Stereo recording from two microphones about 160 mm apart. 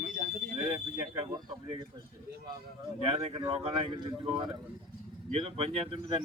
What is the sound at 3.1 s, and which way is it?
Speech, 35° right (ahead or behind).